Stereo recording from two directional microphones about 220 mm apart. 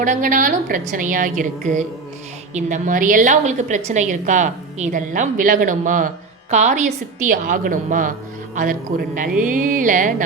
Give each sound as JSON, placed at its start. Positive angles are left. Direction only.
{"t": 0.0, "sound": "a woman's voice", "side_deg": -35}